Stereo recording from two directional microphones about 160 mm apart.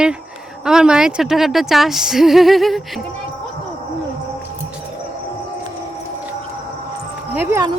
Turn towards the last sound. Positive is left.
turn(degrees=-15)  # may be behind; listen again after turning